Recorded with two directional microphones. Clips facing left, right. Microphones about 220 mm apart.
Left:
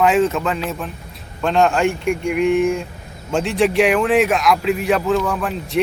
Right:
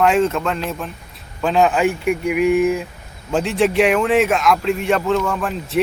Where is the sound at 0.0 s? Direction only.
Centre (ahead or behind).